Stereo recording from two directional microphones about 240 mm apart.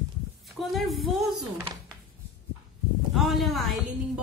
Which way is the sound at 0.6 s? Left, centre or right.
Centre.